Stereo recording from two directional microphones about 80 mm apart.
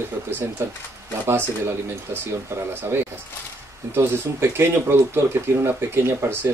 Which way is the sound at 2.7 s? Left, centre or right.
Right.